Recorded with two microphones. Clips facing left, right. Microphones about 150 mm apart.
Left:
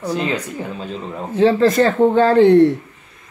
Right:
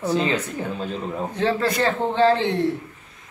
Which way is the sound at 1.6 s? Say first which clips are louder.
Left 9 dB; 45° left (ahead or behind).